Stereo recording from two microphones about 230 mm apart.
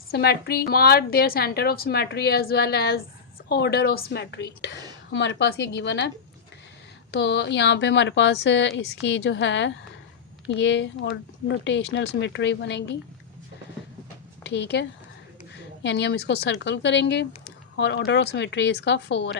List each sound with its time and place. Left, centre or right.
0.1 s a woman's voice: left
7.1 s a woman's voice: left
14.5 s a woman's voice: left